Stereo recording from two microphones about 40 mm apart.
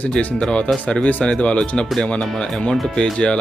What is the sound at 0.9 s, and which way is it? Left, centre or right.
Speech, left.